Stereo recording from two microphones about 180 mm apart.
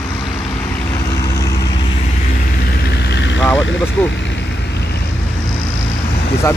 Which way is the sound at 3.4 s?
Centre (ahead or behind).